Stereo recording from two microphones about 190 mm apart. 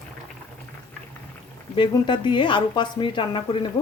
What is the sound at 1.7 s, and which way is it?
Speech, 25° left (ahead or behind).